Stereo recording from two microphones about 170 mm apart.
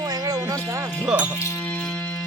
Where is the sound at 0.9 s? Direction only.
5° right (ahead or behind).